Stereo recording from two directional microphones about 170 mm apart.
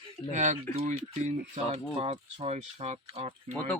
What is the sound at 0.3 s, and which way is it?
Speech, 45° right (ahead or behind).